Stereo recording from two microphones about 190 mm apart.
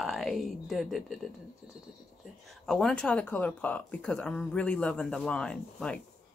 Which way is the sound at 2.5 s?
Centre (ahead or behind).